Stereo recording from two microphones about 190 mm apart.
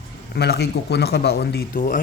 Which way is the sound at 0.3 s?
60° left (ahead or behind).